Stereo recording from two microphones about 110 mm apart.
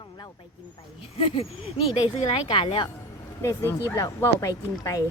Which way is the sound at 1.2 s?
55° left (ahead or behind).